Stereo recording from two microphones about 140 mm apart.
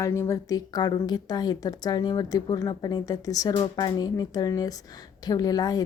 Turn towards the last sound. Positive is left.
turn(degrees=25)  # may be behind; listen again after turning